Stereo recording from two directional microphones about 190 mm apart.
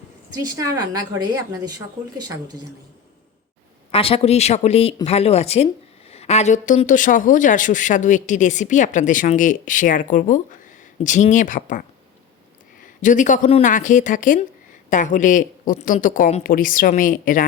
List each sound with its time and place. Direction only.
0.3 s a woman's voice: 20° right (ahead or behind)
3.9 s speech: 30° left (ahead or behind)
12.8 s speech: 40° left (ahead or behind)